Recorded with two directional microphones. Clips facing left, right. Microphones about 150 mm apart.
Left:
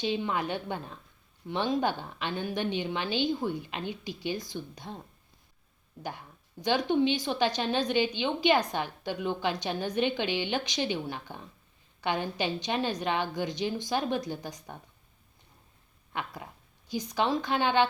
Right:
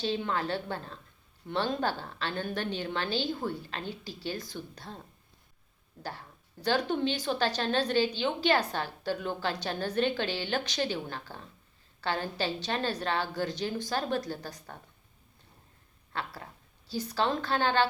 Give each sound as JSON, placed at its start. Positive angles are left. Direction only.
{"t": 0.0, "sound": "a woman's voice", "side_deg": 10}
{"t": 6.0, "sound": "a woman's voice", "side_deg": 15}
{"t": 16.1, "sound": "a woman's voice", "side_deg": 15}